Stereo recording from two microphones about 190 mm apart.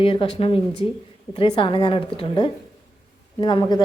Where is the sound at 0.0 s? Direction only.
30° left (ahead or behind).